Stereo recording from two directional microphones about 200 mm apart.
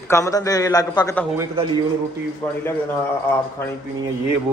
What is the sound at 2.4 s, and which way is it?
Speech, 10° left (ahead or behind).